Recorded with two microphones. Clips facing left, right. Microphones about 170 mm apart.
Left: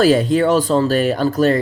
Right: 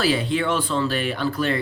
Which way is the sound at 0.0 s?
45° left (ahead or behind).